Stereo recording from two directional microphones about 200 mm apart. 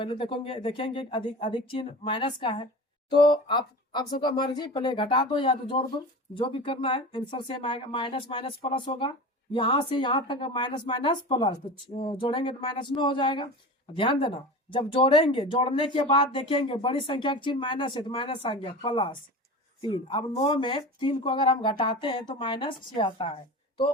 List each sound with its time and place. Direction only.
0.0 s speech: 25° left (ahead or behind)